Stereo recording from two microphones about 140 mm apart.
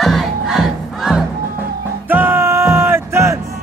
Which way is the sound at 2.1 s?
15° right (ahead or behind).